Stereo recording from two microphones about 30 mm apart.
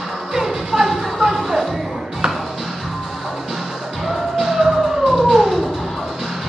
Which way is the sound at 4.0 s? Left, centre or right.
Centre.